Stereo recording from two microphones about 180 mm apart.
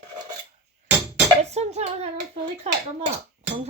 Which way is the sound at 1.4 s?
35° right (ahead or behind).